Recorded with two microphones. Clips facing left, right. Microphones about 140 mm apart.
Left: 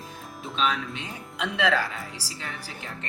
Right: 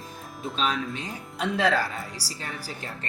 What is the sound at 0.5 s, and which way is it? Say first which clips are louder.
Speech: left 1 dB; 35° right (ahead or behind).